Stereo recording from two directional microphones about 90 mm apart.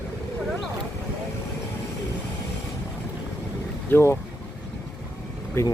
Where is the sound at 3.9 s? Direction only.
30° left (ahead or behind).